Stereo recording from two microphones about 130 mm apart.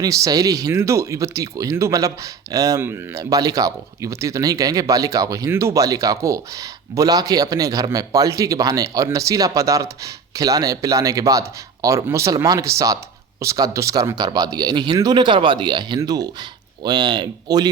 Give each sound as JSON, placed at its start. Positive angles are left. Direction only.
{"t": 0.0, "sound": "speech", "side_deg": -25}